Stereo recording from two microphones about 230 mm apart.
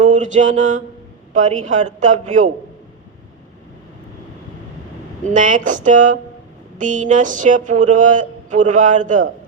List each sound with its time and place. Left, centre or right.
0.0 s mantra: right
1.3 s speech: right
5.2 s speech: right